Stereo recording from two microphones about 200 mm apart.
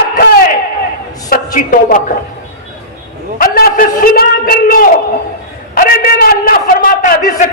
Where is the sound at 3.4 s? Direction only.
45° left (ahead or behind).